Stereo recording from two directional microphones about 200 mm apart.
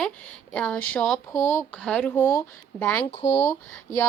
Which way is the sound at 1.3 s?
40° left (ahead or behind).